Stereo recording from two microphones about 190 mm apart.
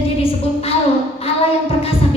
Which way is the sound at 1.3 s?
30° left (ahead or behind).